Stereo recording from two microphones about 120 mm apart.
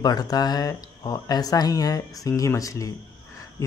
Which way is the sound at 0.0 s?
35° left (ahead or behind).